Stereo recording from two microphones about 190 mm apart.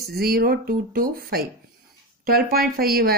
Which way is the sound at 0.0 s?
55° right (ahead or behind).